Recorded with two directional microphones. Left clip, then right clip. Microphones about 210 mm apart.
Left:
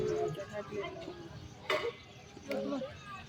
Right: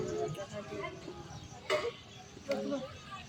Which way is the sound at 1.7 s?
30° left (ahead or behind).